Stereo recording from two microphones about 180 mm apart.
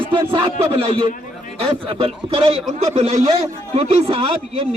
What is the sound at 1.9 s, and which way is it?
A man's voice, 30° right (ahead or behind).